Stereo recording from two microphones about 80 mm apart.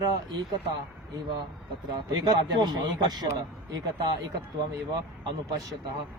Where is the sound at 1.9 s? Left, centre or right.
Right.